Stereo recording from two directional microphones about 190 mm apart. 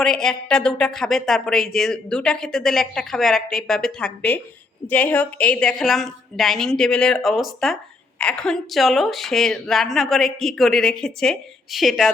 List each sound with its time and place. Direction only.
0.0 s speech: centre (ahead or behind)